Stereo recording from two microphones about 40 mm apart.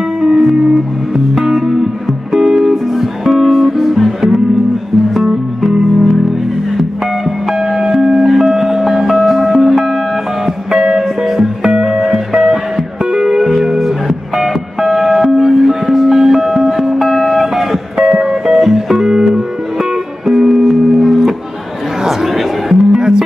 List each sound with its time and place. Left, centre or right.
0.2 s music: centre
2.9 s music: centre
7.2 s music: centre
11.2 s music: centre
11.7 s music: centre
13.4 s music: centre